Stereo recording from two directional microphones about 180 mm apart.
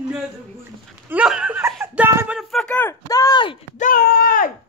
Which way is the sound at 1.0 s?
5° right (ahead or behind).